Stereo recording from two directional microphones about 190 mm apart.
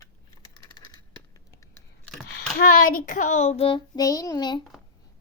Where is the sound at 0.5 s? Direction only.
20° left (ahead or behind).